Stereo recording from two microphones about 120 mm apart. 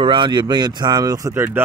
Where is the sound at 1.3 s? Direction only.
15° right (ahead or behind).